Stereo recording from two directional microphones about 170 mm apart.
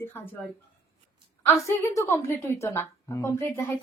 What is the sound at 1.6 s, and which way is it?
A woman's voice, 15° left (ahead or behind).